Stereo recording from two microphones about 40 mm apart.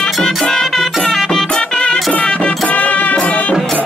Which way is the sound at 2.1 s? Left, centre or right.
Left.